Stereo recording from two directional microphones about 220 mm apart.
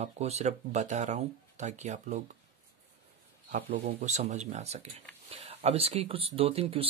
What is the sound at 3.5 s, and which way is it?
Speech, 40° right (ahead or behind).